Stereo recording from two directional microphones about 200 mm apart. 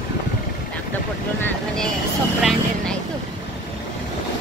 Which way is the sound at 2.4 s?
Centre (ahead or behind).